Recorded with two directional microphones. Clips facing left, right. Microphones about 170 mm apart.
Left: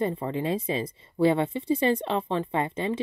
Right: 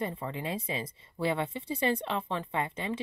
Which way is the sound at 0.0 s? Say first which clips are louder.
Left 7 dB; 30° left (ahead or behind).